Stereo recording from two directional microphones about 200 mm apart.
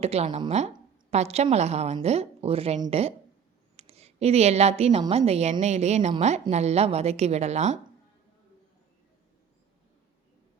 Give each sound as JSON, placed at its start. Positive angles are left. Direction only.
{"t": 0.0, "sound": "a woman's voice", "side_deg": -30}